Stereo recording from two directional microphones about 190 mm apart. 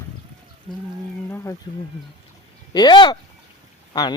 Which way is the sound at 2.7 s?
20° left (ahead or behind).